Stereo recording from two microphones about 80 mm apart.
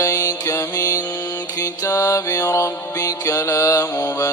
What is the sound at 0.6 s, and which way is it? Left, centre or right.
Mantra, left.